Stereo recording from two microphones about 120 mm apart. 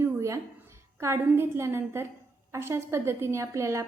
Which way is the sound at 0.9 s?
20° right (ahead or behind).